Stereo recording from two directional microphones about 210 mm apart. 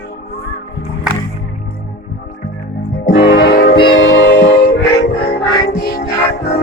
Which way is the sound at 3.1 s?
55° left (ahead or behind).